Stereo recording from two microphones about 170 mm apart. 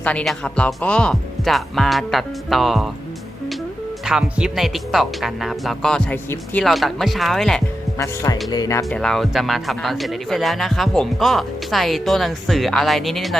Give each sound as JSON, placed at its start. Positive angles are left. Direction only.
{"t": 0.0, "sound": "speech", "side_deg": 5}
{"t": 4.0, "sound": "speech", "side_deg": -5}
{"t": 7.9, "sound": "speech", "side_deg": 20}
{"t": 8.9, "sound": "speech", "side_deg": 5}